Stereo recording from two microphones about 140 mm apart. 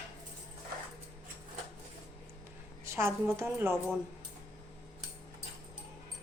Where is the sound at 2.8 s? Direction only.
20° right (ahead or behind).